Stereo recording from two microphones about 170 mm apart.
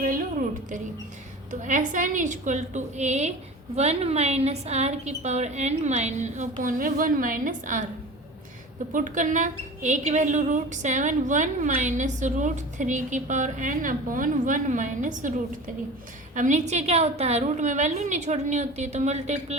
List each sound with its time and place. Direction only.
1.5 s a woman's voice: 50° right (ahead or behind)
8.9 s a woman's voice: 50° right (ahead or behind)